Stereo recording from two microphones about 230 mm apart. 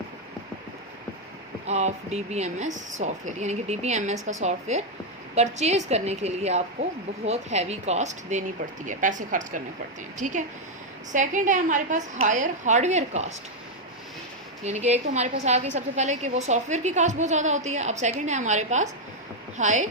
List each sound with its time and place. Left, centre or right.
1.6 s a woman's voice: right
14.6 s a woman's voice: right